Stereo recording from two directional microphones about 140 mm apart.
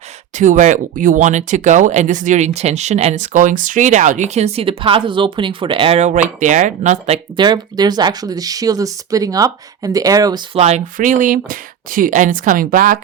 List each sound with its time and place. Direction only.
0.3 s speech: 65° right (ahead or behind)
7.3 s speech: 30° right (ahead or behind)
10.5 s speech: 50° right (ahead or behind)
10.9 s speech: 70° right (ahead or behind)